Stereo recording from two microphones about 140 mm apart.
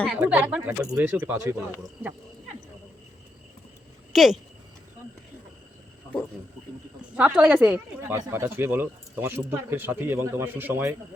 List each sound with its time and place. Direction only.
0.2 s speech: 10° right (ahead or behind)
4.1 s speech: centre (ahead or behind)
7.2 s speech: 10° right (ahead or behind)